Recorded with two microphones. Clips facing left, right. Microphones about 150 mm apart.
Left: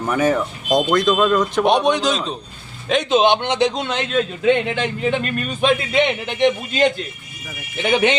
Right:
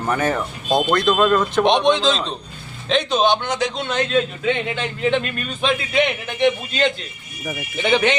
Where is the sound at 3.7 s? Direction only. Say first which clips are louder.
Left 2 dB; 35° left (ahead or behind).